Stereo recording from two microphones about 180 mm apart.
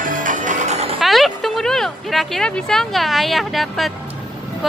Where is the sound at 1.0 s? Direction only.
Centre (ahead or behind).